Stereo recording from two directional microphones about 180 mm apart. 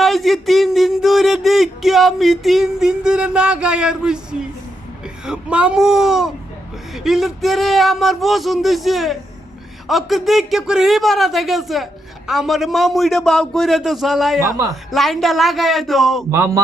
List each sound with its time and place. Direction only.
0.0 s speech: centre (ahead or behind)
14.4 s speech: 20° right (ahead or behind)
14.8 s speech: centre (ahead or behind)